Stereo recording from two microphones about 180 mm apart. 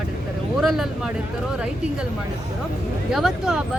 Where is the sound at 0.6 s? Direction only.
Centre (ahead or behind).